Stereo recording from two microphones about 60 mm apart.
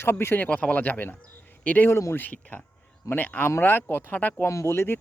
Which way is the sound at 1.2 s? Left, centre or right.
Left.